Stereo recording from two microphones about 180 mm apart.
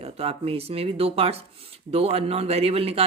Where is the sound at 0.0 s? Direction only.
35° right (ahead or behind).